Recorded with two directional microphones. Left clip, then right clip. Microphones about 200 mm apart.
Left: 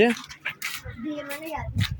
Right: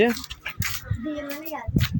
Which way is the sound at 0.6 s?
50° left (ahead or behind).